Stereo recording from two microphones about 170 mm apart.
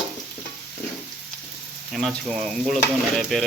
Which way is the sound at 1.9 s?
Centre (ahead or behind).